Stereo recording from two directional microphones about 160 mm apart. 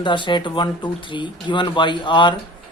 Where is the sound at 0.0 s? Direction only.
30° left (ahead or behind).